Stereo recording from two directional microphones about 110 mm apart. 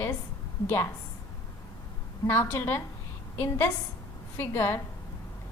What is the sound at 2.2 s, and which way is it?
A woman's voice, 20° left (ahead or behind).